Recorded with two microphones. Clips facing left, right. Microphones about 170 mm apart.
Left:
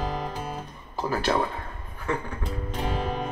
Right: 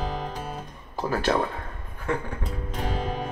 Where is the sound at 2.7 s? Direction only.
Centre (ahead or behind).